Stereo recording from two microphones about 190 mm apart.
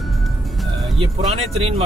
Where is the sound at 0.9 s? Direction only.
30° right (ahead or behind).